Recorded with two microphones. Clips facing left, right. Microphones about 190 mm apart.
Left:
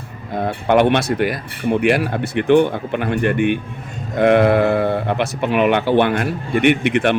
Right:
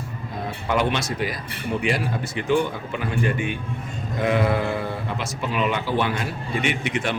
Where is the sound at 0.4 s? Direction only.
65° left (ahead or behind).